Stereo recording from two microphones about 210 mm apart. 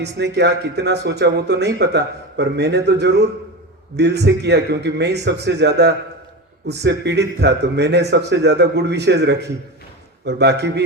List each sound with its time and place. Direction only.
0.0 s speech: 55° right (ahead or behind)